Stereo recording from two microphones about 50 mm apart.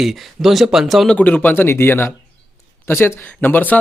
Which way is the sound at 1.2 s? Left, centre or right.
Left.